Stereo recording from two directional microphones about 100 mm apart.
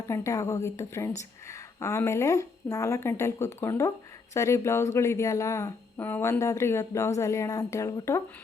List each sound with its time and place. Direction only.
0.1 s a woman's voice: 30° left (ahead or behind)